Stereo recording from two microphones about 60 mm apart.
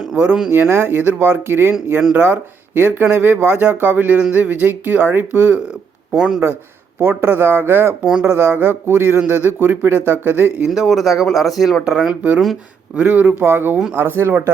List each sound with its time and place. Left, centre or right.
0.7 s speech: right
6.1 s speech: centre
7.0 s speech: right
10.7 s speech: centre
11.9 s speech: centre; by 14.5 s right